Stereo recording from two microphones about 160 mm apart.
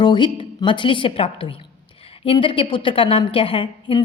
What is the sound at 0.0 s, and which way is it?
A woman's voice, 30° left (ahead or behind).